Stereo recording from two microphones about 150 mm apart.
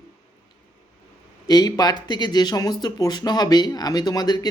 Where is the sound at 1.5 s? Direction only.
25° left (ahead or behind).